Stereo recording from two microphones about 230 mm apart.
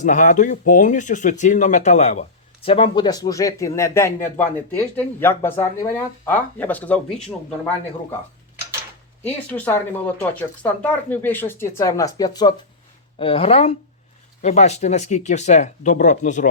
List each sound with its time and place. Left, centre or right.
0.0 s speech: left; by 7.3 s centre
9.2 s speech: centre; by 16.5 s left